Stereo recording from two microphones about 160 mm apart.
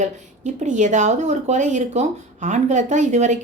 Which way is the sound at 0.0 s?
50° right (ahead or behind).